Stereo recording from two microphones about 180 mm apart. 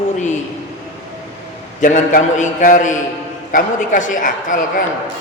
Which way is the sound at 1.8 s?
45° left (ahead or behind).